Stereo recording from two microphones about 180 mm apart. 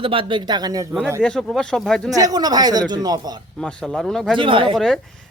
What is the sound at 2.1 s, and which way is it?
Speech, 20° right (ahead or behind).